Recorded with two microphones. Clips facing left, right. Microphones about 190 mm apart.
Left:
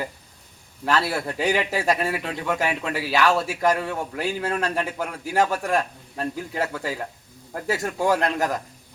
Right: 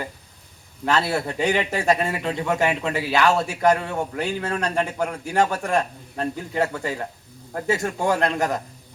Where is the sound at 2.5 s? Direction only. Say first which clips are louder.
Right 2 dB; 25° right (ahead or behind).